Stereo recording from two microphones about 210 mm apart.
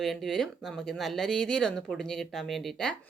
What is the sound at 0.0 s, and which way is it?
Speech, centre (ahead or behind).